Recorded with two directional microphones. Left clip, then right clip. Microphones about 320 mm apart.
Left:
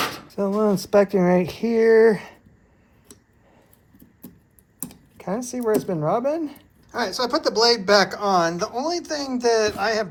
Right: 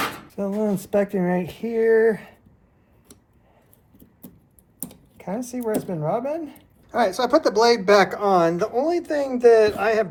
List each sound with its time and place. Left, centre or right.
0.3 s speech: left
5.1 s speech: left
6.9 s speech: centre